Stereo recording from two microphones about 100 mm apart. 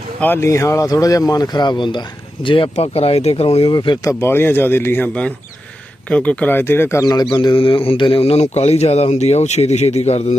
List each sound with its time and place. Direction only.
0.3 s speech: 30° left (ahead or behind); by 3.7 s 80° left
3.7 s speech: 50° left (ahead or behind)
4.2 s speech: 25° left (ahead or behind)
7.0 s a man's voice: 40° left (ahead or behind); by 8.2 s 60° left (ahead or behind)
8.2 s speech: 90° left